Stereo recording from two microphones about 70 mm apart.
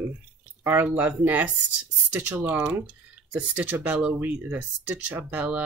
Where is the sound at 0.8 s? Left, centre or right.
Right.